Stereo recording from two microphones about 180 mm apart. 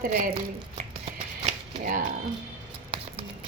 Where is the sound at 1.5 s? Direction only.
50° right (ahead or behind).